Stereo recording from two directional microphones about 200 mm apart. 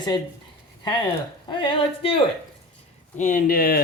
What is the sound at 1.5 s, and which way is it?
Speech, 25° left (ahead or behind).